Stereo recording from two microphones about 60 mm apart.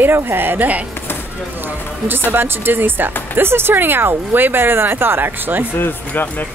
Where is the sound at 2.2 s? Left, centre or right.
Right.